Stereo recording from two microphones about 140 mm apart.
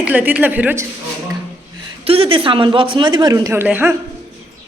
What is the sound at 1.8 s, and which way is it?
A woman's voice, 45° right (ahead or behind).